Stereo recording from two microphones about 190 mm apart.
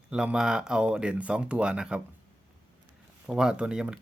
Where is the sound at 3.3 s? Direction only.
5° right (ahead or behind).